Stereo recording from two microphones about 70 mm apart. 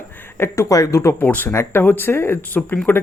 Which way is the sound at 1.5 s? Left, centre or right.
Left.